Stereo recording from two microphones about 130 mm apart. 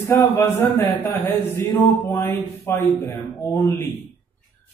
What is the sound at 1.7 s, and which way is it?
Speech, 30° left (ahead or behind).